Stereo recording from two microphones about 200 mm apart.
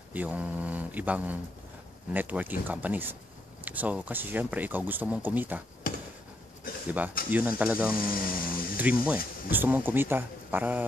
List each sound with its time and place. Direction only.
0.1 s speech: 10° right (ahead or behind)
5.9 s a sound: 45° left (ahead or behind)
7.2 s speech: 10° right (ahead or behind)
8.0 s speech: 45° left (ahead or behind)
8.7 s speech: 5° right (ahead or behind)